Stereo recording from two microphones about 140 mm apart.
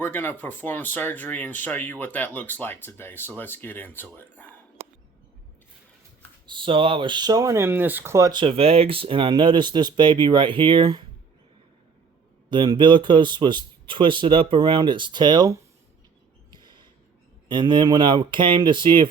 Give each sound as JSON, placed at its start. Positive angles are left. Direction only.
{"t": 0.0, "sound": "speech", "side_deg": 15}
{"t": 6.5, "sound": "speech", "side_deg": -35}
{"t": 12.5, "sound": "speech", "side_deg": -35}
{"t": 16.5, "sound": "a sound", "side_deg": -30}
{"t": 17.5, "sound": "speech", "side_deg": -35}